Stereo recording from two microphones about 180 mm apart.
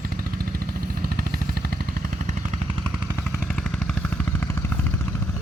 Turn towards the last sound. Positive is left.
turn(degrees=0)  # may be behind; listen again after turning